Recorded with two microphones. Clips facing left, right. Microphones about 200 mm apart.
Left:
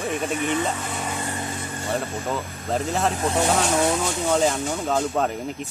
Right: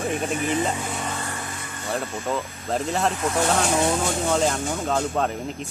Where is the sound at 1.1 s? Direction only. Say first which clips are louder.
Left 3 dB; 20° left (ahead or behind).